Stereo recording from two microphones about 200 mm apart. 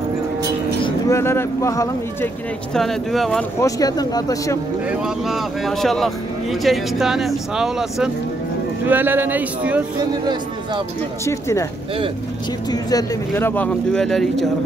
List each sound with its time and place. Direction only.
0.8 s speech: 15° left (ahead or behind)
2.7 s speech: centre (ahead or behind)
3.6 s speech: 20° left (ahead or behind)
4.8 s speech: centre (ahead or behind)
11.2 s speech: 15° left (ahead or behind)
12.7 s speech: 15° left (ahead or behind)